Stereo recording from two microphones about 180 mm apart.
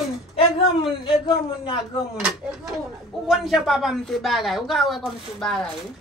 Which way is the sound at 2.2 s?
5° right (ahead or behind).